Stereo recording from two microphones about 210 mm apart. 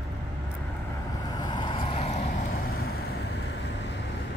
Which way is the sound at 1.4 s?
20° left (ahead or behind).